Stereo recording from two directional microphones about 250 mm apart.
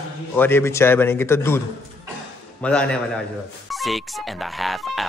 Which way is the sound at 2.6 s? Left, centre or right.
Centre.